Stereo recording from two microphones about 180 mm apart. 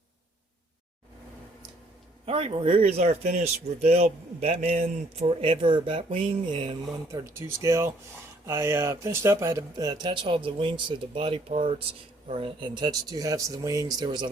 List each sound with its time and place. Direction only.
2.2 s a man's voice: 30° right (ahead or behind)
7.1 s speech: 15° right (ahead or behind)